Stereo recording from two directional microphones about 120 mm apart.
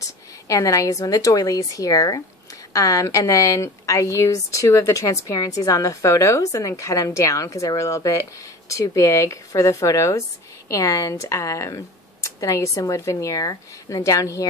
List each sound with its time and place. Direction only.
0.0 s a woman's voice: 25° left (ahead or behind)